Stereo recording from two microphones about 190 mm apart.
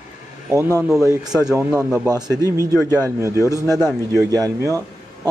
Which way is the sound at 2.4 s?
20° right (ahead or behind).